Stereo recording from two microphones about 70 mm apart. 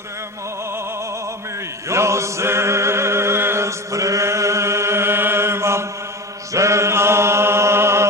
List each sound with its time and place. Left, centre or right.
1.9 s music: right
6.5 s chant: right